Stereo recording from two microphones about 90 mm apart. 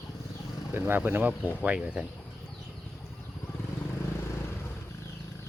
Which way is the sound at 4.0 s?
30° left (ahead or behind).